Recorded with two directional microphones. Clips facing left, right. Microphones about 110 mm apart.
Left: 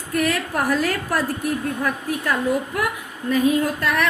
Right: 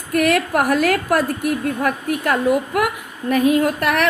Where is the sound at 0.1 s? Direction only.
65° right (ahead or behind).